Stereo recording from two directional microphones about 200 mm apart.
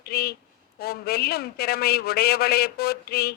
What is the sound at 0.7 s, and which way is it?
Speech, 50° left (ahead or behind).